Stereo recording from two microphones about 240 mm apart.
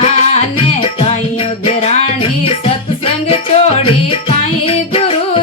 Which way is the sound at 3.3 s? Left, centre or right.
Left.